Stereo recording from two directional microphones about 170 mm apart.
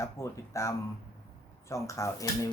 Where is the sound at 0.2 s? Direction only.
15° left (ahead or behind).